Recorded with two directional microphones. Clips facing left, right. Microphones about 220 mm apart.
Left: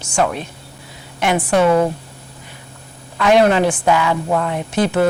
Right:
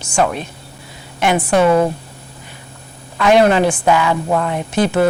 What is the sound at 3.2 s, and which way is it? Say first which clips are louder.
A woman's voice: right 1 dB; 10° right (ahead or behind).